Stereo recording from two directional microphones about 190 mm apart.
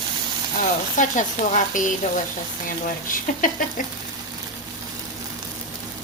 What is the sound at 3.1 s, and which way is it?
Speech, 45° left (ahead or behind).